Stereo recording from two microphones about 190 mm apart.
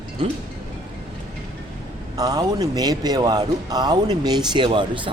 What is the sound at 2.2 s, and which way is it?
Speech, 20° right (ahead or behind).